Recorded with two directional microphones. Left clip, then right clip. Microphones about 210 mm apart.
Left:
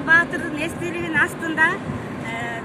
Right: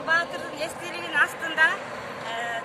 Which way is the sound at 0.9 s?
20° right (ahead or behind).